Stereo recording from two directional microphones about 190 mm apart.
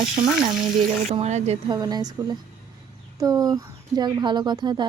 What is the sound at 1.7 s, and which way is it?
Speech, 20° right (ahead or behind).